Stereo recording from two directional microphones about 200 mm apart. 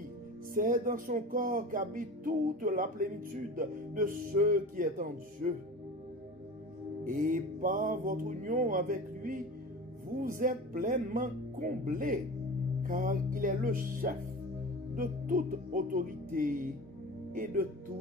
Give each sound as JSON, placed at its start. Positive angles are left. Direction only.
{"t": 0.6, "sound": "speech", "side_deg": -40}
{"t": 7.1, "sound": "speech", "side_deg": -45}